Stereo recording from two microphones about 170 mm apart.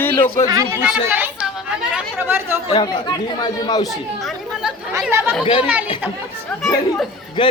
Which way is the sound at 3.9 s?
Centre (ahead or behind).